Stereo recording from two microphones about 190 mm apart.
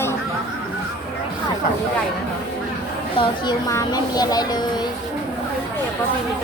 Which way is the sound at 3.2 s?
20° left (ahead or behind).